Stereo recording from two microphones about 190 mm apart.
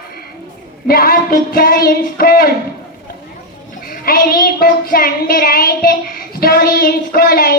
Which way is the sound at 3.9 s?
50° left (ahead or behind).